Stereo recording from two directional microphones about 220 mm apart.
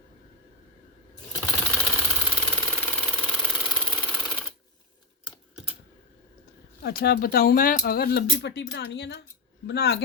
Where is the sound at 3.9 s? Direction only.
5° left (ahead or behind).